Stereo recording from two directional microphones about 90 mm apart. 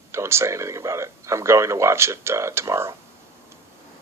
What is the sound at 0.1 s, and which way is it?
Speech, 30° right (ahead or behind).